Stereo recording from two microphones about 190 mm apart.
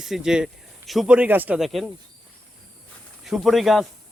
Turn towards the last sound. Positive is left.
turn(degrees=0)  # may be behind; listen again after turning